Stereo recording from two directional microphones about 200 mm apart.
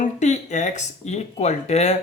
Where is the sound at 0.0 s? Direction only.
35° left (ahead or behind).